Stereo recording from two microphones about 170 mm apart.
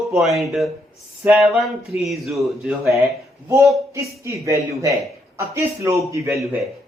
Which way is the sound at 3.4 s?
15° right (ahead or behind).